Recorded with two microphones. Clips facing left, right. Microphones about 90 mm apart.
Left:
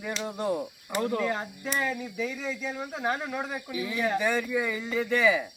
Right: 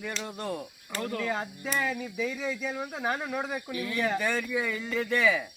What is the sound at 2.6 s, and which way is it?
Speech, centre (ahead or behind).